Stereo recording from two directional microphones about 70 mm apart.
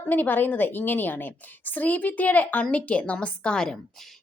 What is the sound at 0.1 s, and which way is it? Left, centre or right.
A woman's voice, left.